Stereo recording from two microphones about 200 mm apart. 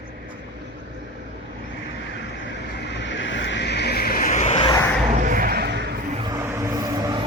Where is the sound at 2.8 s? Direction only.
60° left (ahead or behind); by 4.7 s 35° left (ahead or behind).